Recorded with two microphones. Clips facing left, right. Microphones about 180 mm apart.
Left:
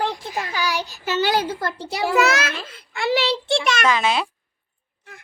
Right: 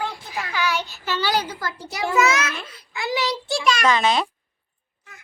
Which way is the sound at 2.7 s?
60° left (ahead or behind).